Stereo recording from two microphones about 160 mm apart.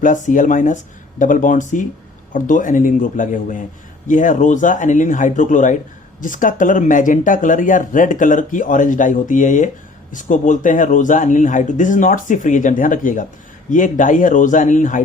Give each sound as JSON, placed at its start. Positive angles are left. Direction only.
{"t": 0.0, "sound": "speech", "side_deg": 50}